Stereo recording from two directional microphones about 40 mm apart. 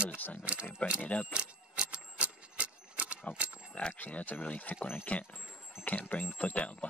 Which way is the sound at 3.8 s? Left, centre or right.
Left.